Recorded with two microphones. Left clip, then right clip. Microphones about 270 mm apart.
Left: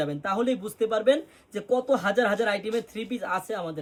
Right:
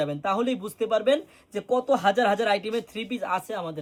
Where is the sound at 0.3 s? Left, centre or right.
Centre.